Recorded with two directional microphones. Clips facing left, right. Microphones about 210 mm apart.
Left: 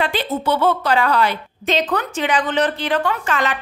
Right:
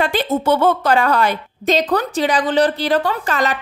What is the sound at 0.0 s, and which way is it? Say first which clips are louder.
A woman's voice: right 3 dB; 45° right (ahead or behind).